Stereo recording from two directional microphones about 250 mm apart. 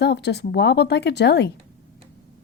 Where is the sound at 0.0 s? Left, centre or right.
Left.